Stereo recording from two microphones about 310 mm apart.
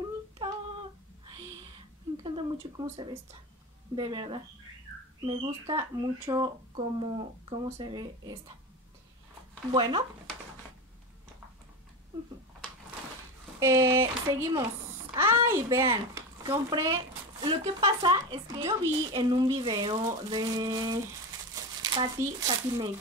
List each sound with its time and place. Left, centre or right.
2.2 s a sound: centre
3.9 s speech: centre
9.7 s speech: centre
13.6 s speech: centre